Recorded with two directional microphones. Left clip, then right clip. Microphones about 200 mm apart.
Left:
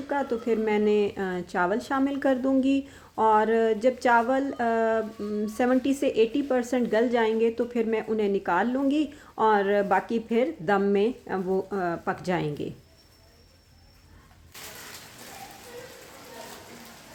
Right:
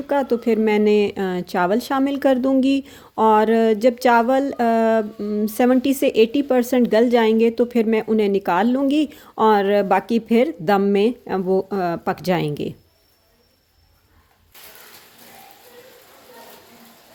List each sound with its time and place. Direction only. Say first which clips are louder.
0.1 s a woman's voice: right 8 dB; 45° right (ahead or behind)